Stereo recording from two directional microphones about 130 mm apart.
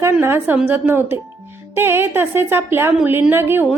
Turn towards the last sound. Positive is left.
turn(degrees=-15)  # may be behind; listen again after turning